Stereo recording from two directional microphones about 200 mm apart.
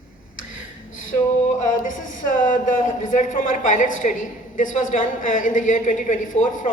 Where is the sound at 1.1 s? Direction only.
35° left (ahead or behind).